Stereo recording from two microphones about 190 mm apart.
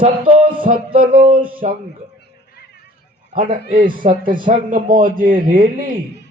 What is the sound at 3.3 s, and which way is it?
A man's voice, 45° right (ahead or behind).